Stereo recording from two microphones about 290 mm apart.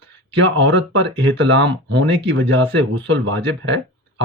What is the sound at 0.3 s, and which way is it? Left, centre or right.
Speech, right.